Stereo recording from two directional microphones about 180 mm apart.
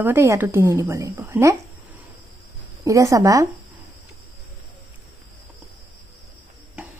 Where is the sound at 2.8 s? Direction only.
20° right (ahead or behind).